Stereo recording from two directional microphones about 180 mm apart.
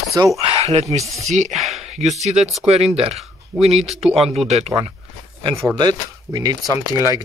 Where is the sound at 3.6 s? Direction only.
35° right (ahead or behind).